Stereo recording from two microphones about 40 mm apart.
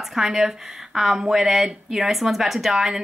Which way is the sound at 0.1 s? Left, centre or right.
Centre.